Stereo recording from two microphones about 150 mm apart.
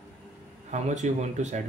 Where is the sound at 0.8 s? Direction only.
50° right (ahead or behind).